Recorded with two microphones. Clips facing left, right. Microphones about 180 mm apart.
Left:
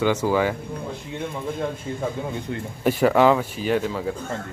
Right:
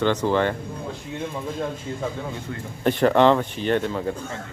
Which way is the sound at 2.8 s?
5° left (ahead or behind).